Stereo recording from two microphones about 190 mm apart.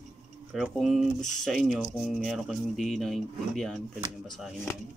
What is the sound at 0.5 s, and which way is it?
Speech, centre (ahead or behind).